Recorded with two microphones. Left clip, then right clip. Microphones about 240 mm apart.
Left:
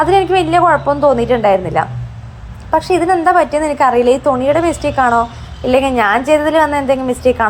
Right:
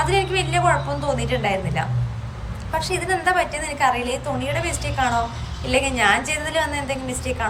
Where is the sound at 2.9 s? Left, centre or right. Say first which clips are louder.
Left 9 dB; left.